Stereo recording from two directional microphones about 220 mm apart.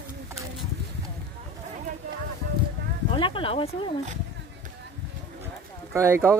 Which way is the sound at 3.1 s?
25° left (ahead or behind).